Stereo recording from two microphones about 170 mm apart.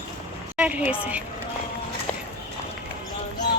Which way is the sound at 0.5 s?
10° right (ahead or behind).